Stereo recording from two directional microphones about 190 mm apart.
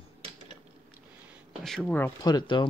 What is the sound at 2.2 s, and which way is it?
Speech, 25° left (ahead or behind).